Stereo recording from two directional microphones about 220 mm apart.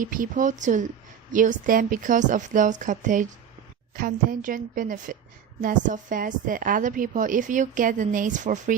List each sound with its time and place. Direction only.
0.0 s a woman's voice: 35° right (ahead or behind)